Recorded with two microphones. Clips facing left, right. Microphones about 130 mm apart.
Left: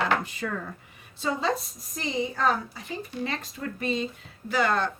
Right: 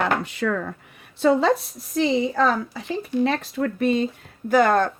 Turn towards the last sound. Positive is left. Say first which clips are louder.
# right 8 dB
turn(degrees=-50)  # may be behind; listen again after turning